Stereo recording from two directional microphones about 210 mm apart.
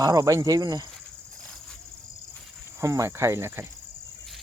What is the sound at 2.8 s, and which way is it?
Speech, 15° right (ahead or behind).